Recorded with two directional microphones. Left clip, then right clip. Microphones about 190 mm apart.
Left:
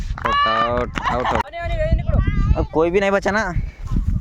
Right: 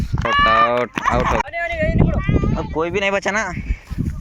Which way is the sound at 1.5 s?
80° left.